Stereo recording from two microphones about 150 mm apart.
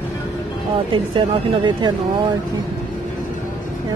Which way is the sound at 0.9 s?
35° right (ahead or behind).